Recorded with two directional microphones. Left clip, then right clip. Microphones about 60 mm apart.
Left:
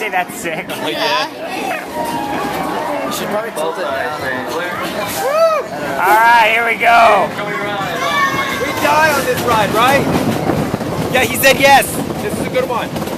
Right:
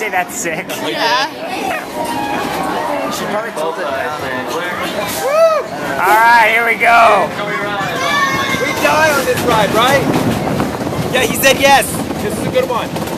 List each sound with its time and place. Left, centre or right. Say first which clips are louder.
5.9 s speech: right 1 dB; centre
8.8 s speech: even; centre
9.8 s speech: left 1 dB; centre
11.1 s speech: even; left